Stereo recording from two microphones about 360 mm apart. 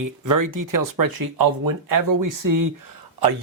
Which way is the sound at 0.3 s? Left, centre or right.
Right.